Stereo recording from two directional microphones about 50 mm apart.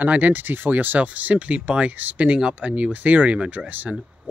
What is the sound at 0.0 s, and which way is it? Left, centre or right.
Speech, right.